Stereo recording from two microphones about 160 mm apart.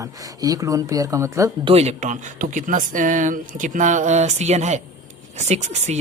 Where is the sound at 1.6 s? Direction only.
40° right (ahead or behind).